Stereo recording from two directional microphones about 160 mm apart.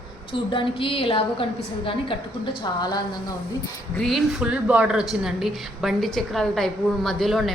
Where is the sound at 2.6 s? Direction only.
25° left (ahead or behind).